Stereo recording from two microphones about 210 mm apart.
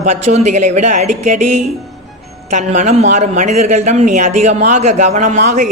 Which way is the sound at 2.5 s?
35° right (ahead or behind).